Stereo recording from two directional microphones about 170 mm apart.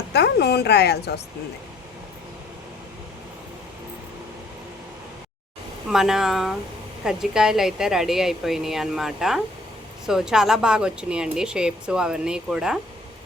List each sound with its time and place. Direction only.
0.1 s speech: 85° left
5.9 s speech: centre (ahead or behind)